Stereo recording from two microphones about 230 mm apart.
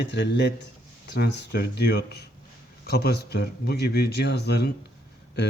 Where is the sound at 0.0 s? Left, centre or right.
Left.